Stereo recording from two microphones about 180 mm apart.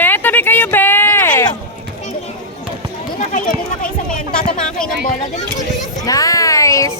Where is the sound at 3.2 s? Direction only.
45° left (ahead or behind).